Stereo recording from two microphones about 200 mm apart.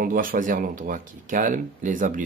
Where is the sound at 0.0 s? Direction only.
45° right (ahead or behind).